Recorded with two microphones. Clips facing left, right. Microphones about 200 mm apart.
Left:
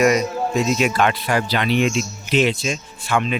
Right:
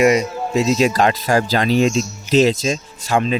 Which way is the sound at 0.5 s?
30° right (ahead or behind).